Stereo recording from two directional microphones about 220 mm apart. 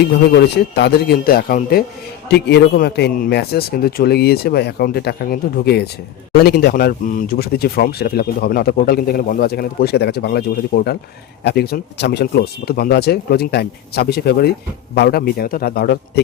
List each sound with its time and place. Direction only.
0.3 s speech: 50° left (ahead or behind)